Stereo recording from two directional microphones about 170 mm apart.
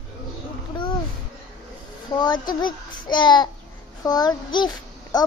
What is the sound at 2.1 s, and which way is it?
A child's voice, 25° left (ahead or behind).